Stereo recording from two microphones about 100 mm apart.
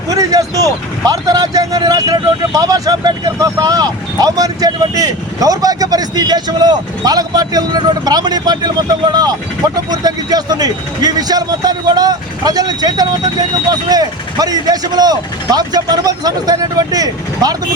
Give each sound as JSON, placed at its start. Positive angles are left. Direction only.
{"t": 0.1, "sound": "a man's voice", "side_deg": -35}